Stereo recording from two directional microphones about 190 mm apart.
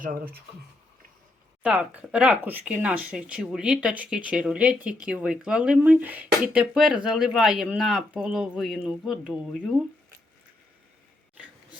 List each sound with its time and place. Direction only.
0.0 s speech: 50° right (ahead or behind)
1.6 s speech: 5° right (ahead or behind)